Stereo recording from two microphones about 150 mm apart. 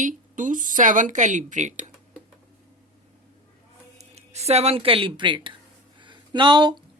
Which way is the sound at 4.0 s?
45° right (ahead or behind).